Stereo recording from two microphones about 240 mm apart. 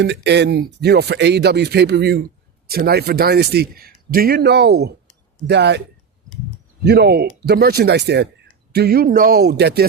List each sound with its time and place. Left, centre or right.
0.0 s a man's voice: right
6.8 s a man's voice: right